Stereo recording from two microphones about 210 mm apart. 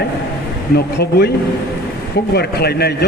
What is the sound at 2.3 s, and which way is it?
Speech, 50° left (ahead or behind).